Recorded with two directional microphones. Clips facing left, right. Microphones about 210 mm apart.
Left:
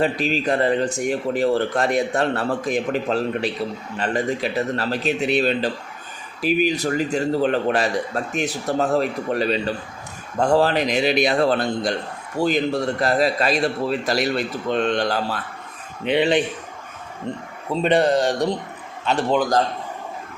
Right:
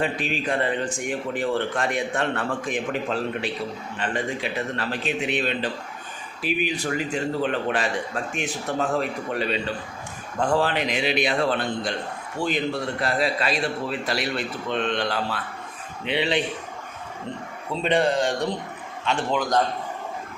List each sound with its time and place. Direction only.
0.0 s a man's voice: 40° left (ahead or behind)
17.8 s a man's voice: 45° left (ahead or behind)